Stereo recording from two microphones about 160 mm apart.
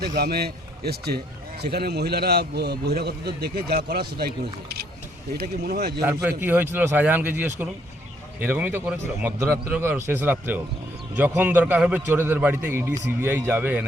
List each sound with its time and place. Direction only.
0.0 s a man's voice: 75° right (ahead or behind)
6.2 s a man's voice: 10° right (ahead or behind)